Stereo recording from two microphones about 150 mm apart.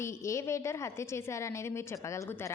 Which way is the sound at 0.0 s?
20° left (ahead or behind).